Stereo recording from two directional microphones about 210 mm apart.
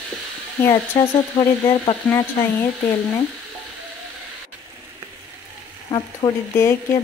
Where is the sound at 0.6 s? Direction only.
15° left (ahead or behind).